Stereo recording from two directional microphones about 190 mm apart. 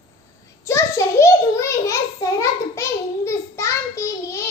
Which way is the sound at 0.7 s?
15° left (ahead or behind).